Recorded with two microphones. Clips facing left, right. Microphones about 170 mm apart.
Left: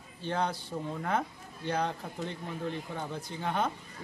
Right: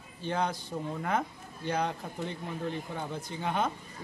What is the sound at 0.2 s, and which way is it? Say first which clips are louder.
Speech: right 1 dB; 10° right (ahead or behind).